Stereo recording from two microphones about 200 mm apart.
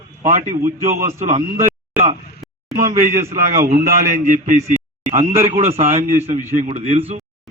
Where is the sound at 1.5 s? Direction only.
10° right (ahead or behind).